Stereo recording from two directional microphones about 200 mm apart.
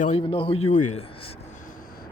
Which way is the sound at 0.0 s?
35° left (ahead or behind).